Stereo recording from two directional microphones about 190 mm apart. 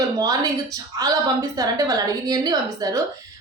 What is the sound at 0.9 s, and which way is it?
A woman's voice, 20° right (ahead or behind).